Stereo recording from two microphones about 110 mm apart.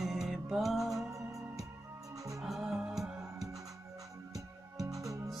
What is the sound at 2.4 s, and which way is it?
Music, centre (ahead or behind).